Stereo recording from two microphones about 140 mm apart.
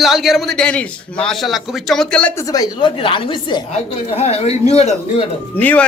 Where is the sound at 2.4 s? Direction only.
25° left (ahead or behind); by 4.5 s 45° left (ahead or behind).